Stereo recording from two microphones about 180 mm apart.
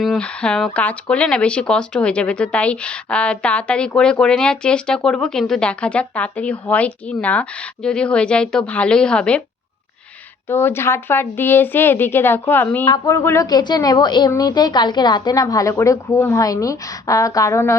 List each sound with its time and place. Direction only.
0.0 s speech: 5° left (ahead or behind)
10.5 s a woman's voice: 10° left (ahead or behind)